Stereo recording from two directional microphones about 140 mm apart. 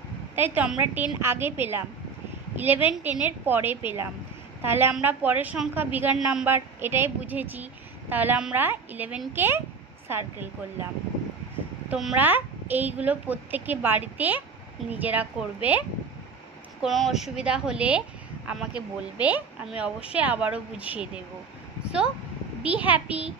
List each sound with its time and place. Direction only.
0.4 s a woman's voice: 10° right (ahead or behind)
11.9 s a woman's voice: 5° right (ahead or behind)
16.8 s a woman's voice: centre (ahead or behind)
22.6 s a woman's voice: 10° right (ahead or behind)